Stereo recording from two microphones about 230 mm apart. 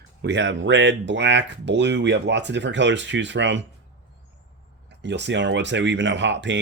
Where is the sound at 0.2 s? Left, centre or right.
Right.